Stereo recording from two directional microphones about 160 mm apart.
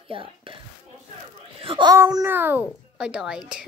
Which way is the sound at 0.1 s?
35° right (ahead or behind).